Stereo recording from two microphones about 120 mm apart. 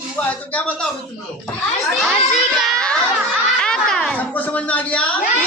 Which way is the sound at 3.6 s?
5° left (ahead or behind).